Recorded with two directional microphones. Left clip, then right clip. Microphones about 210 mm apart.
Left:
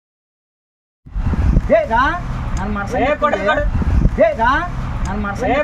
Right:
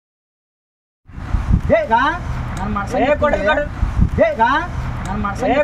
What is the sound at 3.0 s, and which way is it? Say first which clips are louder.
Speech: right 1 dB; 15° right (ahead or behind).